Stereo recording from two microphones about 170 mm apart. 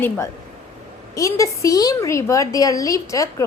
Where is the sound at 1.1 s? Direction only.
20° left (ahead or behind).